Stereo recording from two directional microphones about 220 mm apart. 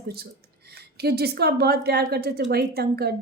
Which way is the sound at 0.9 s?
45° right (ahead or behind).